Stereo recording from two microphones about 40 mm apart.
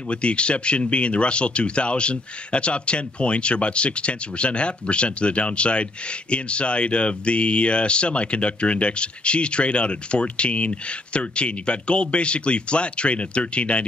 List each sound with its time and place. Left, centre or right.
0.1 s speech: left